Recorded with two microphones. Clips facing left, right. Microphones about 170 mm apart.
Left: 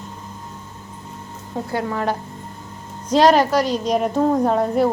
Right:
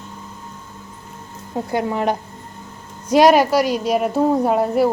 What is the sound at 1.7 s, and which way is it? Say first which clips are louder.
A woman's voice: right 3 dB; 20° right (ahead or behind).